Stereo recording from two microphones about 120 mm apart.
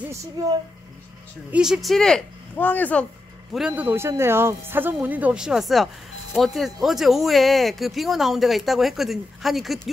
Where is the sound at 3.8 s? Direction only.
20° right (ahead or behind).